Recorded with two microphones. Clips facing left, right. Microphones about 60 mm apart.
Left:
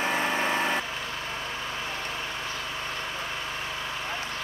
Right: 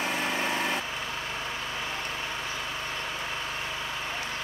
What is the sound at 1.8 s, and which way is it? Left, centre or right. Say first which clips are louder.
Vehicle: even; right.